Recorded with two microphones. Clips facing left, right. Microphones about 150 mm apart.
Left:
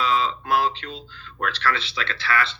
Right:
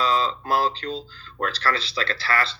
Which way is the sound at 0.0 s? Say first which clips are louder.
Even; 35° right (ahead or behind).